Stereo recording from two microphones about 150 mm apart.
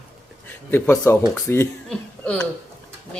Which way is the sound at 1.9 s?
5° left (ahead or behind).